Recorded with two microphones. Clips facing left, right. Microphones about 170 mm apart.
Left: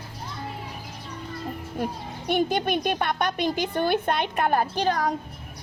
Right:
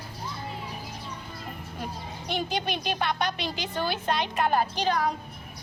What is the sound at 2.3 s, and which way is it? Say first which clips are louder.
A woman's voice: left 7 dB; 55° left (ahead or behind).